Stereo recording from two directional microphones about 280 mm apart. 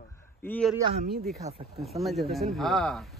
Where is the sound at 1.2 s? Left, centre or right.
Right.